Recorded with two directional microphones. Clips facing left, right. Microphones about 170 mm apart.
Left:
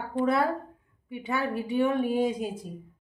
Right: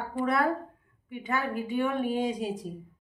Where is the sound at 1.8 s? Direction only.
10° left (ahead or behind).